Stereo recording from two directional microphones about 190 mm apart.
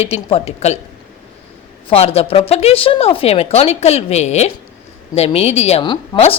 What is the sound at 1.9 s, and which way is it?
A woman's voice, 30° left (ahead or behind).